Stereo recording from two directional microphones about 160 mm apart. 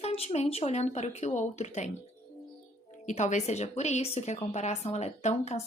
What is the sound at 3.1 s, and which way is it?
Speech, 50° left (ahead or behind).